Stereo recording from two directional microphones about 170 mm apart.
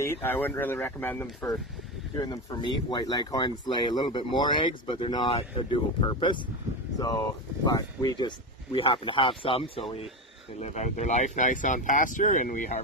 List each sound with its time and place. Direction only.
0.0 s speech: 10° left (ahead or behind); by 12.8 s 50° left (ahead or behind)